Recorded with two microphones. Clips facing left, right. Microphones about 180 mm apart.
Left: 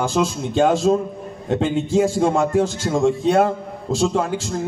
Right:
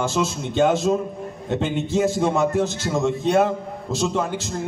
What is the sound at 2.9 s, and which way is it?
Speech, 50° left (ahead or behind).